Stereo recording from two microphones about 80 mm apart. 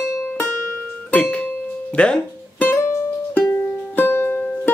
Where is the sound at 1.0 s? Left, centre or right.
Centre.